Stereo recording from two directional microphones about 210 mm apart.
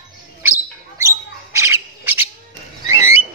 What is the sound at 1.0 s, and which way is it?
Squawk, 15° right (ahead or behind).